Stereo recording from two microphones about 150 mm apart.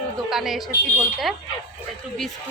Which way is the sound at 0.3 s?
Centre (ahead or behind).